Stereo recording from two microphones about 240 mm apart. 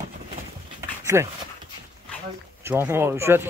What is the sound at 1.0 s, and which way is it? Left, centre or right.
Speech, centre.